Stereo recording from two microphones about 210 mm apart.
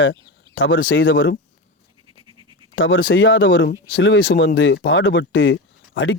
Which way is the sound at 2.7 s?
70° left (ahead or behind).